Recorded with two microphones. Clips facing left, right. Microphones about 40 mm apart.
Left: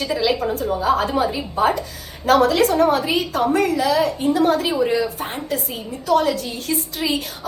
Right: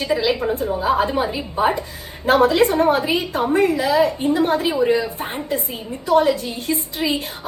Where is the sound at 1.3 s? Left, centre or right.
Centre.